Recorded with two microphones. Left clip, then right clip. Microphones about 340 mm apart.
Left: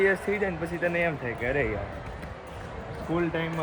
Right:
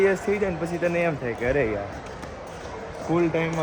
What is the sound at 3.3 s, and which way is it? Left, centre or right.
Speech, centre.